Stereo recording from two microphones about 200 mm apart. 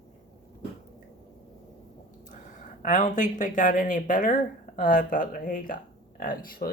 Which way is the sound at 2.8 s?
40° left (ahead or behind).